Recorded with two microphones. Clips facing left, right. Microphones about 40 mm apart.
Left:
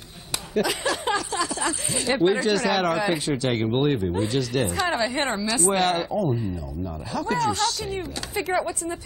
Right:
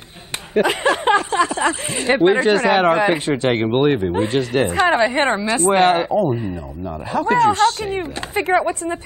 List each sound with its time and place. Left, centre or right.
0.6 s speech: right